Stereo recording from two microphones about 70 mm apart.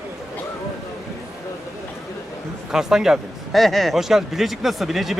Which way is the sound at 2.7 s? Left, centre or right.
Centre.